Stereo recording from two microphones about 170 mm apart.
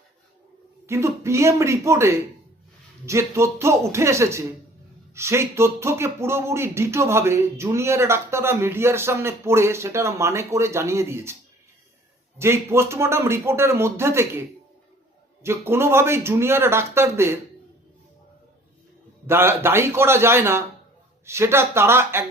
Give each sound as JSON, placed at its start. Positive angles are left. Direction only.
{"t": 0.9, "sound": "speech", "side_deg": -15}
{"t": 12.4, "sound": "speech", "side_deg": -15}
{"t": 15.4, "sound": "speech", "side_deg": -15}
{"t": 19.3, "sound": "speech", "side_deg": -15}